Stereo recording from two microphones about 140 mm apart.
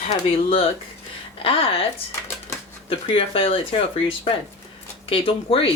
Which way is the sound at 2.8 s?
40° left (ahead or behind).